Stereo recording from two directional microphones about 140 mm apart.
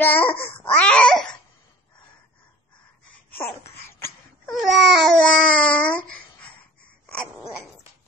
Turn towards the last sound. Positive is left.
turn(degrees=10)  # may be behind; listen again after turning